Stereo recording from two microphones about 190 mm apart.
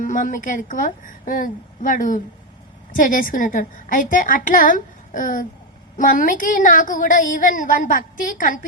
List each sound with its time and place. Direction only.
0.0 s a woman's voice: 45° left (ahead or behind)